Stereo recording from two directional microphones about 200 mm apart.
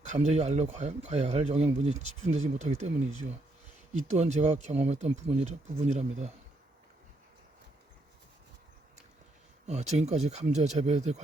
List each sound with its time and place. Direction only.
0.1 s speech: 35° right (ahead or behind)
4.2 s speech: 35° right (ahead or behind)
9.6 s speech: 35° right (ahead or behind)